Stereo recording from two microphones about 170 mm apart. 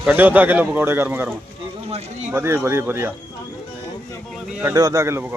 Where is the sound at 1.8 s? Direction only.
40° right (ahead or behind).